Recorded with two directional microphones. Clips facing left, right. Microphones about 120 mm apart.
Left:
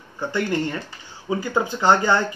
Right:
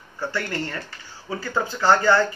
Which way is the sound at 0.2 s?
15° left (ahead or behind).